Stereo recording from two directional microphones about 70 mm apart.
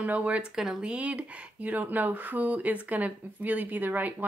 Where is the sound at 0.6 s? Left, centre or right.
Centre.